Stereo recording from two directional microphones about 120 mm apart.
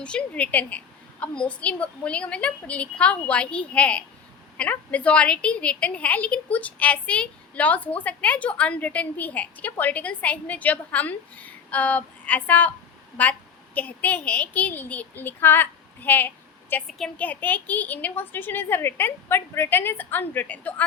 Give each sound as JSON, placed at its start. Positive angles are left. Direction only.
{"t": 0.0, "sound": "a woman's voice", "side_deg": 10}